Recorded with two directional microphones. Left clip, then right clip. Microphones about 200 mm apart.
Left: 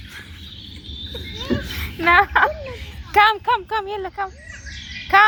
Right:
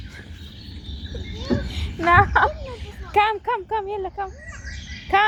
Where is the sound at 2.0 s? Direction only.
5° left (ahead or behind).